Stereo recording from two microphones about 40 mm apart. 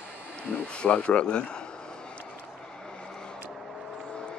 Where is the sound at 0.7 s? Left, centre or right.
Left.